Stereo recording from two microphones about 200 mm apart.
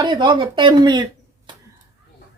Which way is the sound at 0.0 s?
20° right (ahead or behind).